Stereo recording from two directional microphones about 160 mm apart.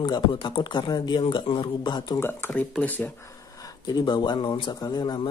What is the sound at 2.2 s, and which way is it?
Speech, 15° left (ahead or behind).